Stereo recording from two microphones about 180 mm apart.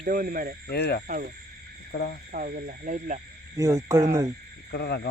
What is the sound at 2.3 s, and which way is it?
Speech, 50° right (ahead or behind).